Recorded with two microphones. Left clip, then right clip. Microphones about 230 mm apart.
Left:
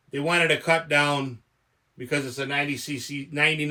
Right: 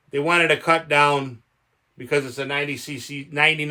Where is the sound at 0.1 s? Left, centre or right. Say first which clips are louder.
Right 4 dB; right.